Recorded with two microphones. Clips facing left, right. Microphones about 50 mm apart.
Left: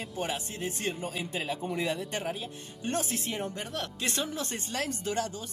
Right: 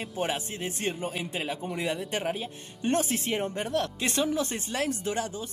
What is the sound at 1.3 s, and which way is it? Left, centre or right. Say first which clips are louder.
Speech: even; centre.